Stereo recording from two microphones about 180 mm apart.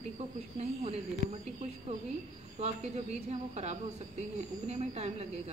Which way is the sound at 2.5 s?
35° right (ahead or behind).